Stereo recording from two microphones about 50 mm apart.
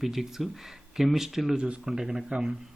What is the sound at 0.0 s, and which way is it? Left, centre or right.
Speech, centre.